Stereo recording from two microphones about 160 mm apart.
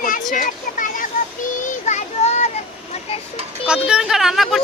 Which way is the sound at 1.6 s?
45° left (ahead or behind).